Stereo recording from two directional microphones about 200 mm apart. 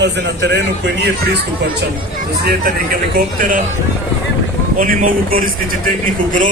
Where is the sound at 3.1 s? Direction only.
45° right (ahead or behind).